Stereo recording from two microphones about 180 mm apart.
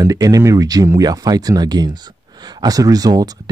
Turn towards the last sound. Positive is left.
turn(degrees=-20)  # may be behind; listen again after turning